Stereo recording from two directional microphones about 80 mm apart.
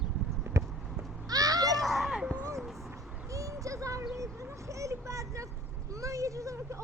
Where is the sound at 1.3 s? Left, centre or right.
Right.